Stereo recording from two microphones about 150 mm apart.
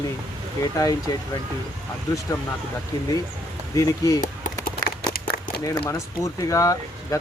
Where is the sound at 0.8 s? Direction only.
25° left (ahead or behind).